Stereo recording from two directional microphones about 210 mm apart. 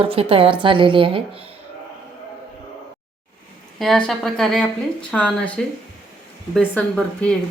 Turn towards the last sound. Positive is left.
turn(degrees=5)  # may be behind; listen again after turning